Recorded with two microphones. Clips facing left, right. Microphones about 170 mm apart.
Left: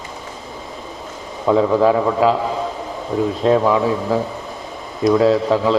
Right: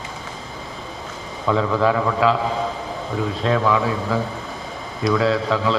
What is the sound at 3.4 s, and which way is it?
A man's voice, 35° left (ahead or behind).